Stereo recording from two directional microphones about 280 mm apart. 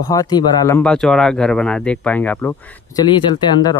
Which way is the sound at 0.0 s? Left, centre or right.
Centre.